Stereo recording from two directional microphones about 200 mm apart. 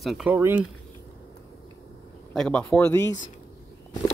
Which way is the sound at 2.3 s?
5° left (ahead or behind).